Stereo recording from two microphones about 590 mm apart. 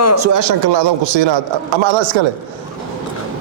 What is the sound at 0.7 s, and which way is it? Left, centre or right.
Speech, right.